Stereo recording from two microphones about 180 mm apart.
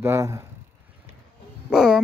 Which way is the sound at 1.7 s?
5° right (ahead or behind).